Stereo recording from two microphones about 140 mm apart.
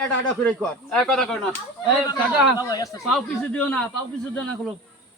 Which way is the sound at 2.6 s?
25° left (ahead or behind).